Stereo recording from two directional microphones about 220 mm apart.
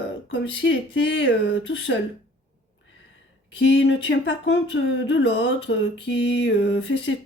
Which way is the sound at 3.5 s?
55° left (ahead or behind).